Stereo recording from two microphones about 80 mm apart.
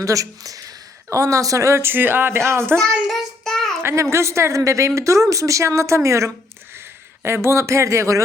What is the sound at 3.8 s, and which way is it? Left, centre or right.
A woman's voice, right.